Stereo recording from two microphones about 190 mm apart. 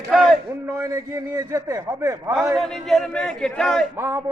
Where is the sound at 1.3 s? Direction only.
15° right (ahead or behind).